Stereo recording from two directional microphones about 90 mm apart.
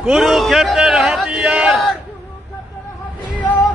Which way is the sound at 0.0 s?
5° right (ahead or behind).